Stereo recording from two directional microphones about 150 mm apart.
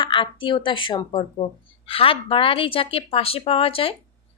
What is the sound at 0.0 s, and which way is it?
A woman's voice, 35° left (ahead or behind).